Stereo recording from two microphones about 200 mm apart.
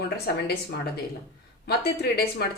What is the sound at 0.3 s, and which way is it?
Speech, 55° left (ahead or behind).